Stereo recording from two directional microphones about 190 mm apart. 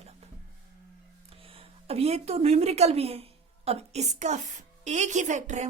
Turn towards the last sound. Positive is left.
turn(degrees=-40)  # may be behind; listen again after turning